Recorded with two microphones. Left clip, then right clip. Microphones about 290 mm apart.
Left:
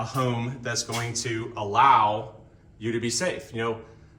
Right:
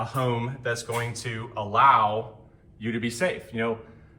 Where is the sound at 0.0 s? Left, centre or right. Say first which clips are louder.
Right 1 dB; centre.